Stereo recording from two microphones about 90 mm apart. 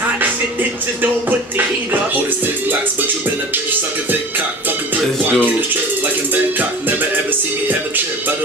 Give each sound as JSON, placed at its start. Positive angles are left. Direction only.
{"t": 2.4, "sound": "music", "side_deg": -20}
{"t": 4.6, "sound": "music", "side_deg": -20}